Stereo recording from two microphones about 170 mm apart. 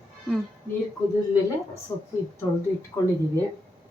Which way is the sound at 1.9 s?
20° left (ahead or behind).